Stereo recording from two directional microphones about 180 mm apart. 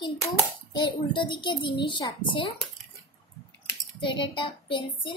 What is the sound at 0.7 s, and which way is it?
A child's voice, 25° left (ahead or behind).